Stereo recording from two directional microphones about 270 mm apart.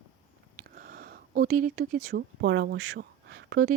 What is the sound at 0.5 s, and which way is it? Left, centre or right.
Speech, right.